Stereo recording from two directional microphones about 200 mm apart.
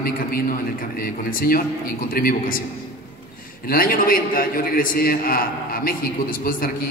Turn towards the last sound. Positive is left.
turn(degrees=45)  # may be behind; listen again after turning